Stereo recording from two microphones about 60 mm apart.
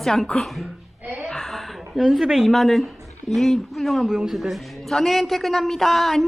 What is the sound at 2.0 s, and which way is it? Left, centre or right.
A man's voice, centre.